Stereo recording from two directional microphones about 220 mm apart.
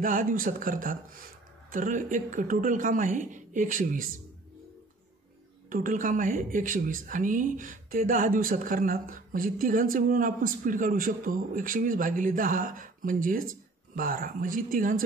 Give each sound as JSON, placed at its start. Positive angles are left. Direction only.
{"t": 0.0, "sound": "speech", "side_deg": -40}
{"t": 5.7, "sound": "speech", "side_deg": -40}